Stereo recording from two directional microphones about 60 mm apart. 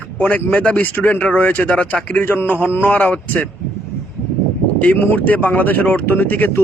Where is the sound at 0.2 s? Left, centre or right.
Left.